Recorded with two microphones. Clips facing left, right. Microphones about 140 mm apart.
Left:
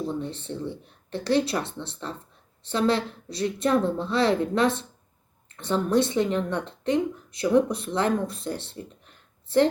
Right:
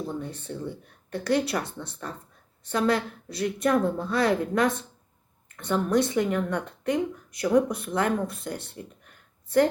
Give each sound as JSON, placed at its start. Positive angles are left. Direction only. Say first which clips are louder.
{"t": 0.2, "sound": "a woman's voice", "louder": "left 2 dB", "side_deg": 25}